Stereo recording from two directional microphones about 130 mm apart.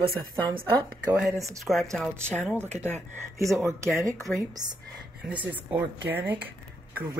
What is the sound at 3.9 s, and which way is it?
Speech, 20° right (ahead or behind).